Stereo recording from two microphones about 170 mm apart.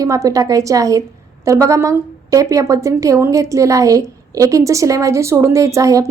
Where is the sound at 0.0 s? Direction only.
20° right (ahead or behind).